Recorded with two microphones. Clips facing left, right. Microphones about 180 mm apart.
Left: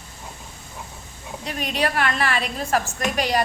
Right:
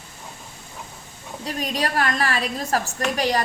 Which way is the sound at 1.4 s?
35° right (ahead or behind).